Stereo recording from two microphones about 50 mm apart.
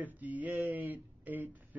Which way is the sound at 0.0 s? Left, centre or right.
Right.